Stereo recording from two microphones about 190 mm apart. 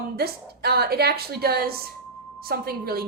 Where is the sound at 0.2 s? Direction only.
55° right (ahead or behind).